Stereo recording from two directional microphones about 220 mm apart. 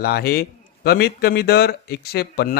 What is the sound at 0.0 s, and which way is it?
Speech, 45° left (ahead or behind).